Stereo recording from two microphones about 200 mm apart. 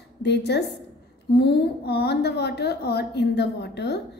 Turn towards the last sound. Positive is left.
turn(degrees=55)  # may be behind; listen again after turning